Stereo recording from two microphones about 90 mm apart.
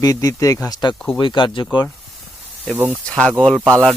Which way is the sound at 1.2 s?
65° left (ahead or behind).